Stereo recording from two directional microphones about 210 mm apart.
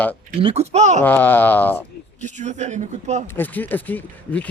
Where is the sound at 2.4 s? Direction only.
35° right (ahead or behind).